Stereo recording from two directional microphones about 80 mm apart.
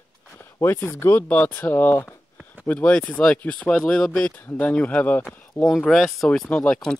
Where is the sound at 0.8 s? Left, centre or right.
Left.